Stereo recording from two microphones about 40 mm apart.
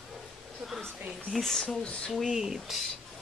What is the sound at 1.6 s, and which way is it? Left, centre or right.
Speech, left.